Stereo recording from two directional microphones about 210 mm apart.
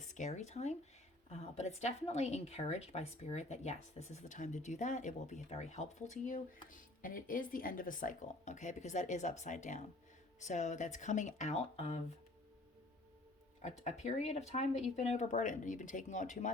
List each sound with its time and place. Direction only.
0.0 s a woman's voice: 35° left (ahead or behind)
13.6 s a woman's voice: 35° left (ahead or behind)